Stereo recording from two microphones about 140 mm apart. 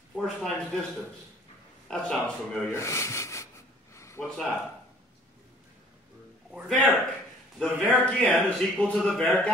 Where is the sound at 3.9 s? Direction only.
20° left (ahead or behind).